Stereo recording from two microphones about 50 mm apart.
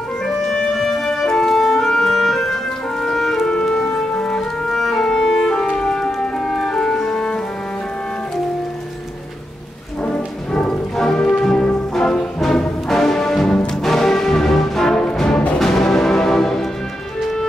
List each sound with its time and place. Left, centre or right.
0.5 s music: centre
4.1 s music: left
4.4 s clarinet: centre
5.8 s music: centre
10.0 s music: left
10.7 s music: centre